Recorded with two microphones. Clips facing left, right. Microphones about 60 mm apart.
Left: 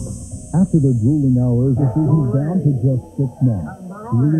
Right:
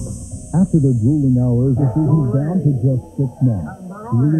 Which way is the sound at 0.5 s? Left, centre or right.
Centre.